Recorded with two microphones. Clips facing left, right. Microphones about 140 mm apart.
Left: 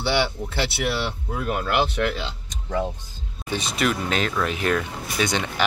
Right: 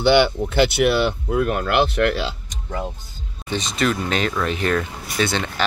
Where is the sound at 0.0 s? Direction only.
90° right.